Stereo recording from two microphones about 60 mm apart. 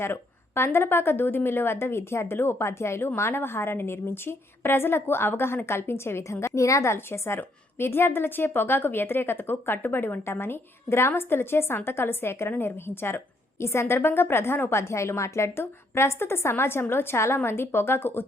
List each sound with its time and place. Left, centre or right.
0.0 s a woman's voice: left
6.9 s a woman's voice: left